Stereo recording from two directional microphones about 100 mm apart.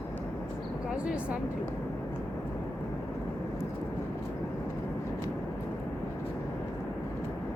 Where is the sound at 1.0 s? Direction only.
10° right (ahead or behind).